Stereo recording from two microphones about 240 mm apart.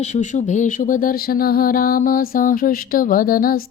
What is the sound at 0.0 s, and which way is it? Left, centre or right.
Speech, left.